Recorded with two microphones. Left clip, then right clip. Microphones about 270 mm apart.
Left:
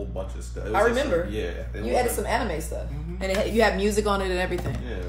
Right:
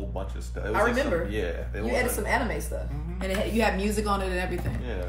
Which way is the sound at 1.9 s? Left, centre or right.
Centre.